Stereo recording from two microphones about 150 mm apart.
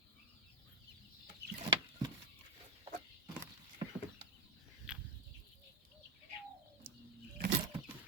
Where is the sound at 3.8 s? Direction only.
30° right (ahead or behind).